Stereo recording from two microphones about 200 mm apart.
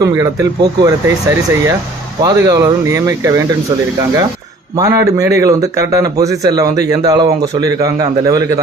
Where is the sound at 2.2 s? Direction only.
15° right (ahead or behind).